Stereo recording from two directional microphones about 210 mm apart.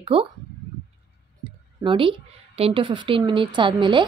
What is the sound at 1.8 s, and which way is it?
Speech, 25° right (ahead or behind).